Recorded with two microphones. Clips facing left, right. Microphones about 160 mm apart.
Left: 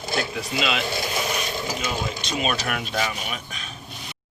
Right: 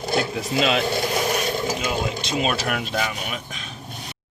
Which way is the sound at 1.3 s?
45° right (ahead or behind).